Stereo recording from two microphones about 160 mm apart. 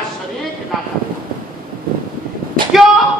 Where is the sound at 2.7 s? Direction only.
Centre (ahead or behind).